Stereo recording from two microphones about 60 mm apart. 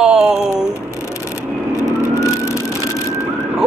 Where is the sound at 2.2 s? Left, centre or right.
Left.